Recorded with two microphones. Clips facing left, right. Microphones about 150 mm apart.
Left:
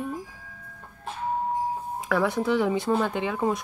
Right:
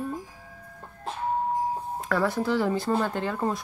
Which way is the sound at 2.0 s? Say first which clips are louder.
Left 1 dB; 5° left (ahead or behind).